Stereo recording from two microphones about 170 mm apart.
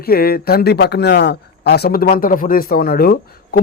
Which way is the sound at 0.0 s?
65° left (ahead or behind).